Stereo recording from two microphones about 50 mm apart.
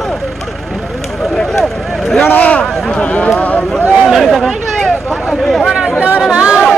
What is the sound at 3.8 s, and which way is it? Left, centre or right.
Speech, centre.